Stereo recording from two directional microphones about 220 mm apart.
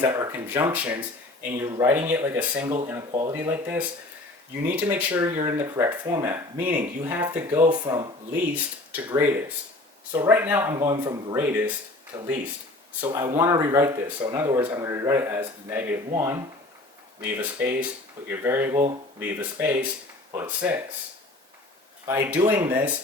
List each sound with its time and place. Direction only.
0.0 s speech: 15° right (ahead or behind)
3.1 s speech: 20° right (ahead or behind)
3.3 s speech: 10° right (ahead or behind)
8.5 s speech: 10° right (ahead or behind)
22.0 s speech: 10° right (ahead or behind)